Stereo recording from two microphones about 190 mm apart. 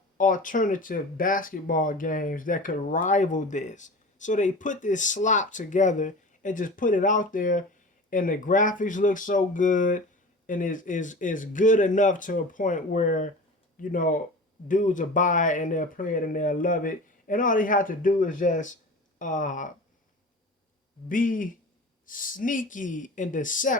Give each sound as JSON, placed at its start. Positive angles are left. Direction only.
{"t": 0.2, "sound": "speech", "side_deg": 45}
{"t": 21.1, "sound": "speech", "side_deg": 45}